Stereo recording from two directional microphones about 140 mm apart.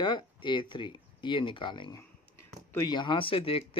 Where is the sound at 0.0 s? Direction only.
35° left (ahead or behind).